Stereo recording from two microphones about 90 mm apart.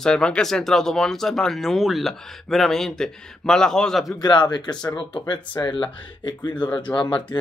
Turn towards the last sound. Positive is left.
turn(degrees=55)  # may be behind; listen again after turning